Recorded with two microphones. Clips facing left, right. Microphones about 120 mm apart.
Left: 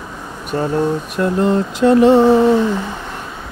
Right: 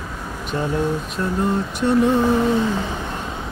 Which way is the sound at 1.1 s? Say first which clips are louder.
Left 7 dB; 90° left.